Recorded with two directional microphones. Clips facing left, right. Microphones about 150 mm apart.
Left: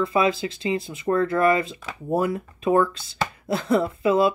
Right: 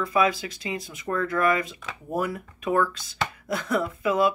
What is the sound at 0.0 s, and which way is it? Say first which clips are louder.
Speech: left 2 dB; 25° left (ahead or behind).